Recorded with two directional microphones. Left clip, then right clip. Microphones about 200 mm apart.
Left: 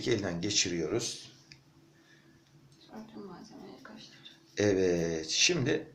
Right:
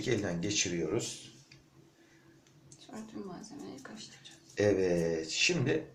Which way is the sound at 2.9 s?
40° right (ahead or behind).